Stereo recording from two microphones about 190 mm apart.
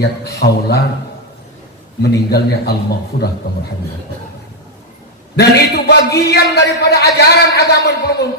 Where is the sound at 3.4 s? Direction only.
50° left (ahead or behind).